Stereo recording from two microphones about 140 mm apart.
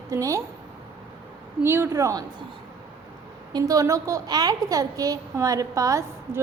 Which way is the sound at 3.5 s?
25° right (ahead or behind).